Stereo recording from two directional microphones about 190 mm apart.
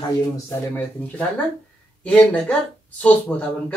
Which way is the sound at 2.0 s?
5° left (ahead or behind).